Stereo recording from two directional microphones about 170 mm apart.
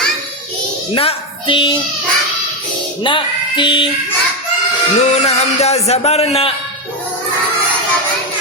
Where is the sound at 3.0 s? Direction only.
30° left (ahead or behind).